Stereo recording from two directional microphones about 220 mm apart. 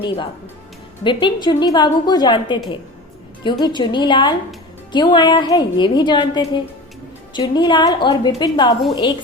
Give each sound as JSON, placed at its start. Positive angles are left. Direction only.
{"t": 1.0, "sound": "a woman's voice", "side_deg": 20}